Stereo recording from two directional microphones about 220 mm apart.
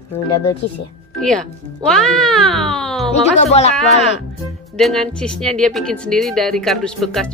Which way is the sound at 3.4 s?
30° left (ahead or behind).